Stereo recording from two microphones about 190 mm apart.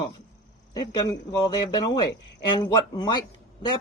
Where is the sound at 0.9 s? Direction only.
20° left (ahead or behind).